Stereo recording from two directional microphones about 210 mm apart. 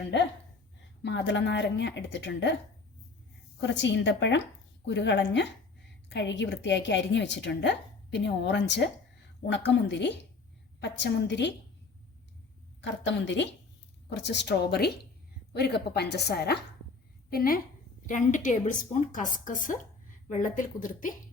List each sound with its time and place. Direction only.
0.1 s a woman's voice: 55° left (ahead or behind)
3.6 s a woman's voice: 55° left (ahead or behind)
12.8 s a woman's voice: 60° left (ahead or behind); by 21.1 s 40° left (ahead or behind)